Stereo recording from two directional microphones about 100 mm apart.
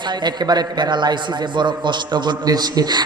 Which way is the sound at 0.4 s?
45° right (ahead or behind).